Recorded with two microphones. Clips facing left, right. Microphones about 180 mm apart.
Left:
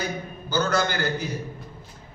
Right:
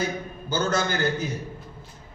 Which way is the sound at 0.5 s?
25° right (ahead or behind).